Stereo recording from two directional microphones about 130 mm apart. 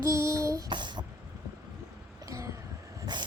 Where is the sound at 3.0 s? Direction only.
35° right (ahead or behind).